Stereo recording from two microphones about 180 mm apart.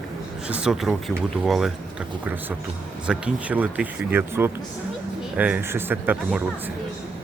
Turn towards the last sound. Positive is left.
turn(degrees=-10)  # may be behind; listen again after turning